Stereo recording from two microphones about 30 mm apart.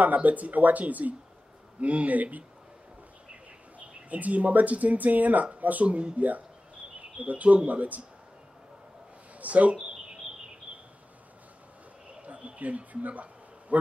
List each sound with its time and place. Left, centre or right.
0.0 s speech: right
1.8 s speech: right
3.8 s speech: right
5.9 s speech: right
9.4 s speech: right
12.1 s a sound: right
12.5 s speech: right